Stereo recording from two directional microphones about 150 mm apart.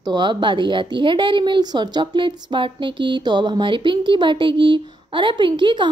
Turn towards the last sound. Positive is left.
turn(degrees=-30)  # may be behind; listen again after turning